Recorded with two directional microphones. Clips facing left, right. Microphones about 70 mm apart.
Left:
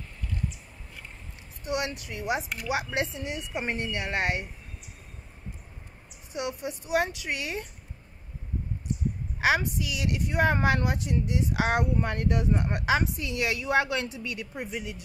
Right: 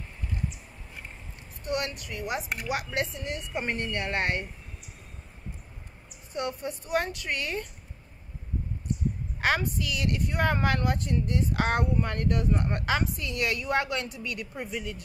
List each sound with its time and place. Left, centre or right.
1.6 s speech: centre
6.3 s speech: centre
9.4 s speech: centre